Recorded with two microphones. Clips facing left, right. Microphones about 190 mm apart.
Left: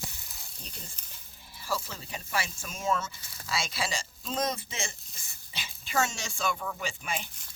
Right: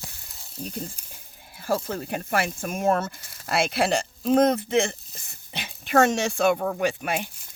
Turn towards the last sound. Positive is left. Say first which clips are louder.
# right 10 dB
turn(degrees=-60)  # may be behind; listen again after turning